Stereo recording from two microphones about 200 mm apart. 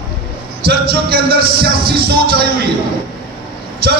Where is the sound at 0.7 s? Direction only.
50° right (ahead or behind).